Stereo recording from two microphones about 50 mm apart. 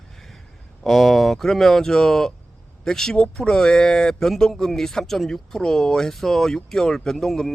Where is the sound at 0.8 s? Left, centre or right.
Centre.